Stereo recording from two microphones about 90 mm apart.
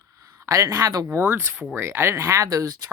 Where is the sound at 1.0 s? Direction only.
20° right (ahead or behind); by 2.8 s 40° right (ahead or behind).